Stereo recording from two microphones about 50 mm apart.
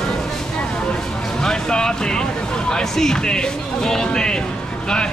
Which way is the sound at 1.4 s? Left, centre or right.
Centre.